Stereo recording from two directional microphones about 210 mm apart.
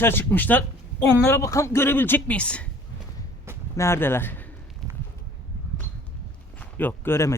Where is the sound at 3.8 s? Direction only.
10° left (ahead or behind).